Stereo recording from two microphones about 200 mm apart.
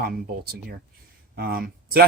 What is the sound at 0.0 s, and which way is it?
Speech, 50° right (ahead or behind).